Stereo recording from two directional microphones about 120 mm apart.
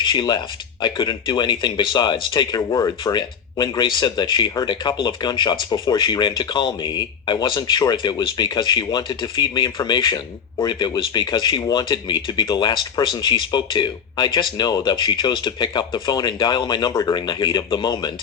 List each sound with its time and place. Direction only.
0.0 s speech: 40° left (ahead or behind)
16.9 s speech: 25° left (ahead or behind)
17.2 s speech: 35° left (ahead or behind)